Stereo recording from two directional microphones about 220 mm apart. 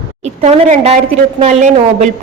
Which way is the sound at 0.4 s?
30° right (ahead or behind).